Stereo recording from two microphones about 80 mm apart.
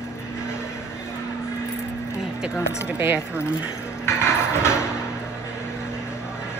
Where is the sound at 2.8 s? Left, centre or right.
Right.